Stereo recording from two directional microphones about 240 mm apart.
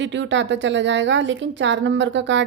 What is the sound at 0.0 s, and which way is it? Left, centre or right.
A woman's voice, right.